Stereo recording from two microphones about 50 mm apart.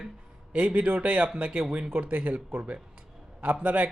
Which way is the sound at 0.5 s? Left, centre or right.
Right.